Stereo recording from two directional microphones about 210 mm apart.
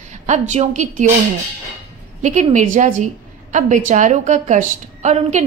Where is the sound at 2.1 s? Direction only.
35° right (ahead or behind).